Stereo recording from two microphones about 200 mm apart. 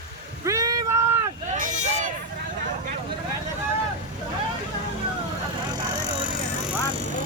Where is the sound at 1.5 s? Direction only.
40° right (ahead or behind).